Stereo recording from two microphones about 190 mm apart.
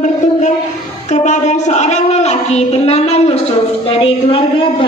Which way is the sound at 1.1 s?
40° left (ahead or behind).